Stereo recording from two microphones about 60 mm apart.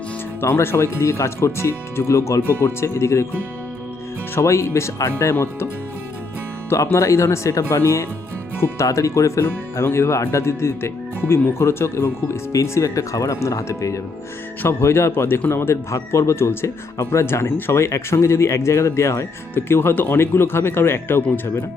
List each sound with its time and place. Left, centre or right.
0.4 s speech: left
4.4 s speech: left
6.9 s speech: left
12.0 s speech: left
13.7 s speech: left
14.6 s speech: left